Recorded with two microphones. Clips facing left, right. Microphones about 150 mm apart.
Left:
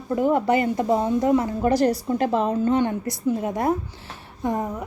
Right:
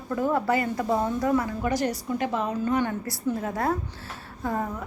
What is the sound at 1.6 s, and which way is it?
A woman's voice, 35° left (ahead or behind).